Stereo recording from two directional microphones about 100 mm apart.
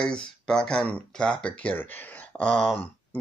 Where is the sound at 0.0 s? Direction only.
10° left (ahead or behind).